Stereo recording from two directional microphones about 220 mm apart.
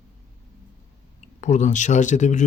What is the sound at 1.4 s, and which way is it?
Speech, 35° left (ahead or behind).